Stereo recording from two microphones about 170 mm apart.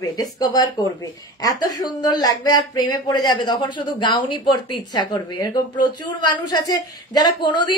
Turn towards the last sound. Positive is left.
turn(degrees=25)  # may be behind; listen again after turning